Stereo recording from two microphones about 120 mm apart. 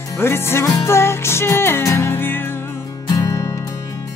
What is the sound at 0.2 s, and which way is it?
Music, 20° left (ahead or behind).